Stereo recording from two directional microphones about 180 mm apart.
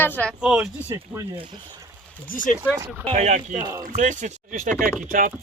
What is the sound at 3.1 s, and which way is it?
Speech, 40° right (ahead or behind).